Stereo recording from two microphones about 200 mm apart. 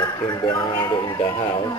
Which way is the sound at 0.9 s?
25° left (ahead or behind).